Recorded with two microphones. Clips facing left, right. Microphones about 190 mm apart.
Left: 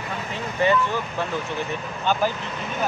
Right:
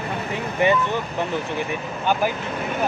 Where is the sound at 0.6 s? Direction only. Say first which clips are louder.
Right 1 dB; 15° right (ahead or behind).